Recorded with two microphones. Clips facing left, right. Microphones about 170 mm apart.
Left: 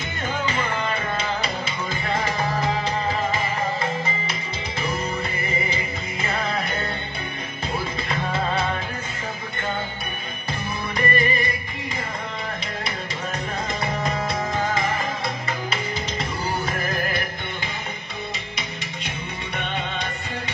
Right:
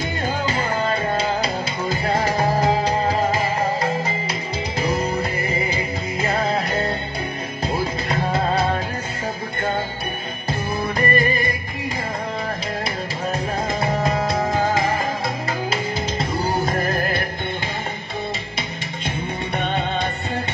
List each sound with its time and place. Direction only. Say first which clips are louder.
0.5 s music: right 4 dB; 35° right (ahead or behind)
11.0 s music: right 2 dB; 40° right (ahead or behind)
13.7 s music: right 5 dB; 35° right (ahead or behind)
19.0 s music: right 9 dB; 40° right (ahead or behind)